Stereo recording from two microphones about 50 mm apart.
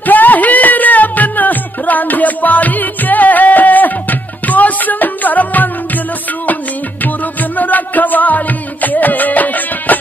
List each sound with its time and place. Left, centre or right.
0.0 s music: left